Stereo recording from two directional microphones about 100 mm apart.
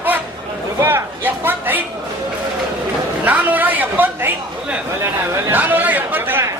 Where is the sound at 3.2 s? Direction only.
15° right (ahead or behind).